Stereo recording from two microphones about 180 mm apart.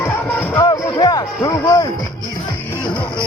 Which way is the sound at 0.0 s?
10° left (ahead or behind).